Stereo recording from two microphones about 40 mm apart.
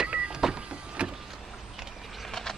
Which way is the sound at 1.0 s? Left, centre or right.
Right.